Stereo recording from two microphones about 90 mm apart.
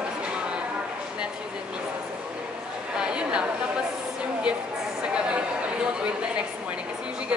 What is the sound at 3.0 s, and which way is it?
Chatter, 10° right (ahead or behind).